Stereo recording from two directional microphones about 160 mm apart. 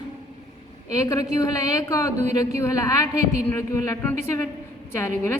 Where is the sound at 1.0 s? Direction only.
20° left (ahead or behind).